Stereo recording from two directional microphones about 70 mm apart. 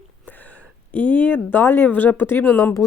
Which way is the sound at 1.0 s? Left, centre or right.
Left.